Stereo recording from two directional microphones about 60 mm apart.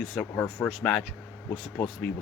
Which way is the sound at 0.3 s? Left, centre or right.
Left.